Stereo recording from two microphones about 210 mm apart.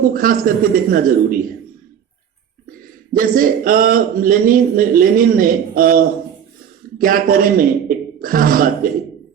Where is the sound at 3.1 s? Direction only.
40° right (ahead or behind).